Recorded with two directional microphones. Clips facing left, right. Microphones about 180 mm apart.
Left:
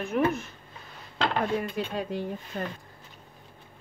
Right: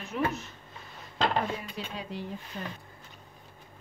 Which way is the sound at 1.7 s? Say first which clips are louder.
Left 7 dB; 50° left (ahead or behind).